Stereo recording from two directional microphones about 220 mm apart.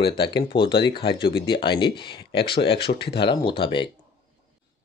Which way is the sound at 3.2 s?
20° left (ahead or behind).